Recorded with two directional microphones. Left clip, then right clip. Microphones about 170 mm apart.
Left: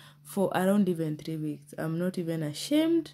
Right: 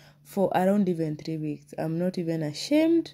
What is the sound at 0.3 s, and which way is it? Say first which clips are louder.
A woman's voice: right 3 dB; 15° right (ahead or behind).